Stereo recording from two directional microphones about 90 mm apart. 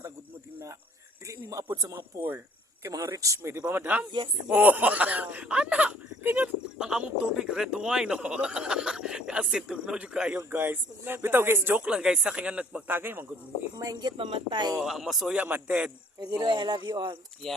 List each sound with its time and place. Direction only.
1.3 s speech: 35° right (ahead or behind)
2.0 s speech: 25° right (ahead or behind)
2.8 s speech: 35° right (ahead or behind)
3.7 s speech: 20° right (ahead or behind)
10.5 s speech: 20° right (ahead or behind)
11.9 s speech: 10° right (ahead or behind); by 13.3 s 25° right (ahead or behind)
13.7 s speech: 50° right (ahead or behind)
14.8 s speech: 5° right (ahead or behind)
15.4 s speech: 15° right (ahead or behind)
16.4 s speech: 55° right (ahead or behind)
17.4 s speech: 5° left (ahead or behind)